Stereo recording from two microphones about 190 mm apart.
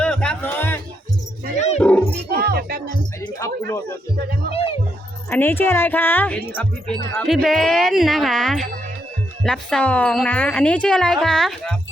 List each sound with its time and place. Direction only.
0.0 s music: 5° left (ahead or behind)
1.5 s dog: 35° left (ahead or behind)
1.8 s dog: 5° left (ahead or behind)
2.3 s speech: 55° right (ahead or behind)
5.3 s speech: 10° left (ahead or behind)